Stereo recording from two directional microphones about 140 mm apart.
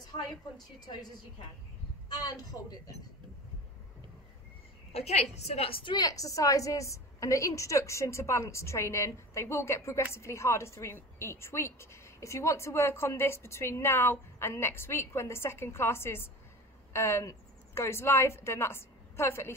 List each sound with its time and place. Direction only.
0.1 s a woman's voice: 30° left (ahead or behind)
4.9 s a woman's voice: 50° left (ahead or behind); by 19.5 s 20° left (ahead or behind)